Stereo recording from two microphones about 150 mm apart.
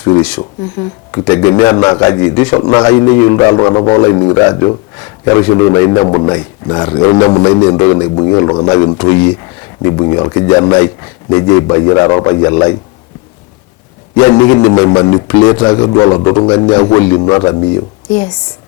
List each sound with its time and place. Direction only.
1.1 s a man's voice: 20° left (ahead or behind)
14.2 s a man's voice: 20° left (ahead or behind)